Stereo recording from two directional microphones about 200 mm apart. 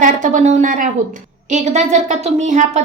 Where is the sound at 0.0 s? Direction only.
40° right (ahead or behind).